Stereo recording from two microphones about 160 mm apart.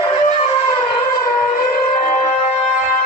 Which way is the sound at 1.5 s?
50° left (ahead or behind).